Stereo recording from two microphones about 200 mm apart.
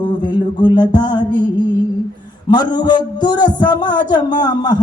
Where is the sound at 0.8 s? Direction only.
20° left (ahead or behind).